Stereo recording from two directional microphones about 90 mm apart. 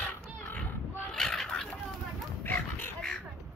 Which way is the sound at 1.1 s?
5° left (ahead or behind).